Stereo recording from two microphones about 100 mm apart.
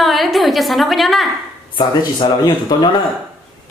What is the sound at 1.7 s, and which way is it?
Speech, 50° left (ahead or behind).